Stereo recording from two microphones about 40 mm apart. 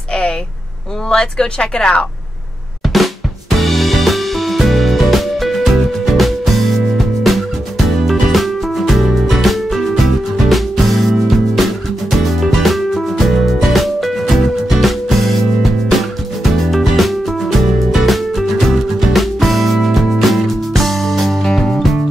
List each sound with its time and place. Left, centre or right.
1.0 s speech: centre
2.9 s drum kit: centre
8.0 s music: centre
16.5 s music: centre